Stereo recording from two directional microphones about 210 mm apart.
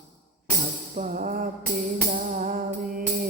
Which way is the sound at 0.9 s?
35° right (ahead or behind).